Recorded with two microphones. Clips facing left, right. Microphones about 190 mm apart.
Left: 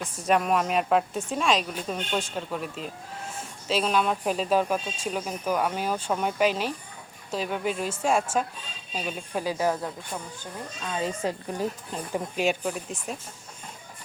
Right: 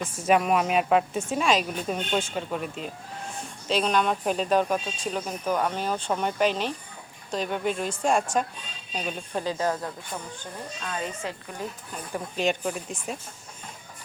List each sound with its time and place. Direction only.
0.2 s speech: 5° right (ahead or behind)
11.0 s speech: 35° left (ahead or behind)
12.4 s speech: 5° left (ahead or behind)